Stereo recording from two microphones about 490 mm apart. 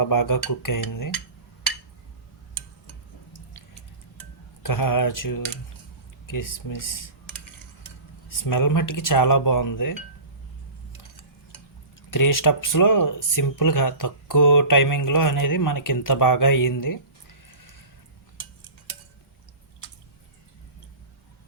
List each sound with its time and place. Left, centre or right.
0.0 s speech: left
4.6 s speech: left
8.4 s speech: left
12.1 s speech: left